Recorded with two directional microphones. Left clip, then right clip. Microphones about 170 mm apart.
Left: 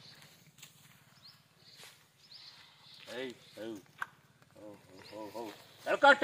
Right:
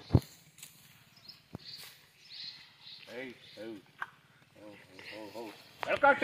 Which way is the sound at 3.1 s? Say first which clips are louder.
Left 3 dB; 20° right (ahead or behind).